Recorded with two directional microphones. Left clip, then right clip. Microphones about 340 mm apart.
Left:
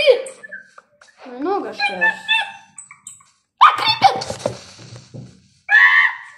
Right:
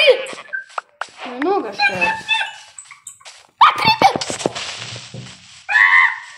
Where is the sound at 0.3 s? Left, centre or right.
Centre.